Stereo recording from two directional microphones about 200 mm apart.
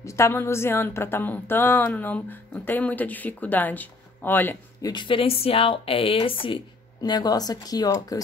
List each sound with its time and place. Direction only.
0.0 s speech: 15° left (ahead or behind)
4.9 s speech: 25° left (ahead or behind)